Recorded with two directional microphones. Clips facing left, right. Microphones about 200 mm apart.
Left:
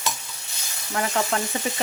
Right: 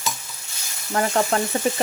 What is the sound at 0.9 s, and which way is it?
Frying, 40° right (ahead or behind).